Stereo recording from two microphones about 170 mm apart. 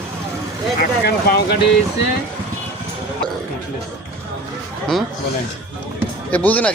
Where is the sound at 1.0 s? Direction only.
70° left (ahead or behind).